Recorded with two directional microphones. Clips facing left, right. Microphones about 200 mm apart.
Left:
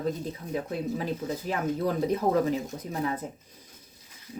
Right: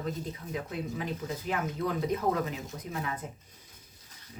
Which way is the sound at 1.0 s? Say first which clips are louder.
Left 4 dB; 35° left (ahead or behind).